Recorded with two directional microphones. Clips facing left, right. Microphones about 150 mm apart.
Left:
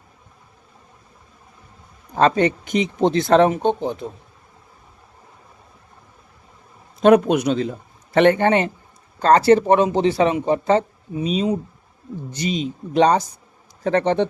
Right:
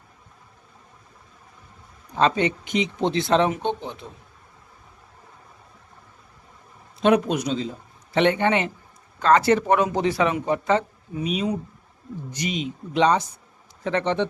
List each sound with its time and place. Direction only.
2.1 s speech: 45° left (ahead or behind)
7.0 s a man's voice: 50° left (ahead or behind)